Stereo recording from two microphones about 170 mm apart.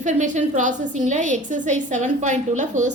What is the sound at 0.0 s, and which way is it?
A woman's voice, 45° right (ahead or behind).